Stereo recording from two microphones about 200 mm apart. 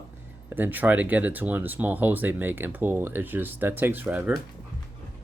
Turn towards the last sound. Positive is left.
turn(degrees=-5)  # may be behind; listen again after turning